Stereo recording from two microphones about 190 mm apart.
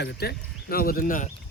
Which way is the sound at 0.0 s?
60° left (ahead or behind).